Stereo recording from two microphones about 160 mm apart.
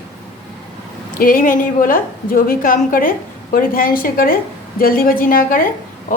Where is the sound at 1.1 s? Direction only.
60° left (ahead or behind).